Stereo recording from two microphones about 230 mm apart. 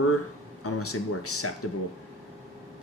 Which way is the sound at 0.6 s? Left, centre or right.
Left.